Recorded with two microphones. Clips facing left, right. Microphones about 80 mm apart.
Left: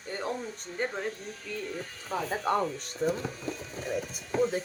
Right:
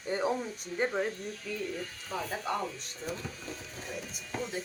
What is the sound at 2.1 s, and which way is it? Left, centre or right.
Speech, left.